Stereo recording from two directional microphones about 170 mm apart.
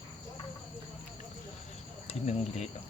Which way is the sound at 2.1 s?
40° left (ahead or behind).